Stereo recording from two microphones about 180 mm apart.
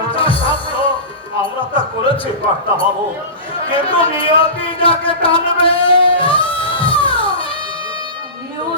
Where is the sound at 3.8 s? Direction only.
30° left (ahead or behind).